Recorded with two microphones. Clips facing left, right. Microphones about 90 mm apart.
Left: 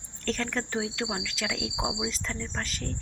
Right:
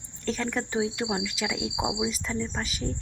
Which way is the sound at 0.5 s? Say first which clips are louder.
Right 3 dB; 10° right (ahead or behind).